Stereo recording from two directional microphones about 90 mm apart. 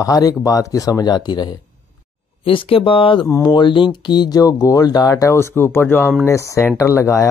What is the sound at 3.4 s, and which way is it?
Speech, 65° left (ahead or behind).